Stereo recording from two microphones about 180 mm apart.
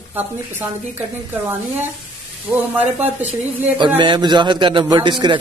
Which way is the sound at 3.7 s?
25° right (ahead or behind).